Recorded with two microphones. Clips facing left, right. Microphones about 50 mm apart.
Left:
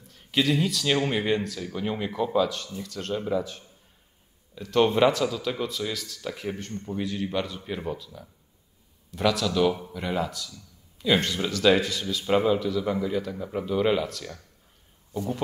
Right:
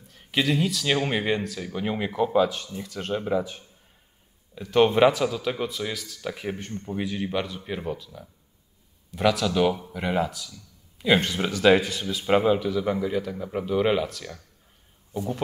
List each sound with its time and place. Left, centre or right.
0.1 s speech: centre
1.6 s speech: centre
9.5 s speech: right
10.5 s a sound: right
11.2 s speech: centre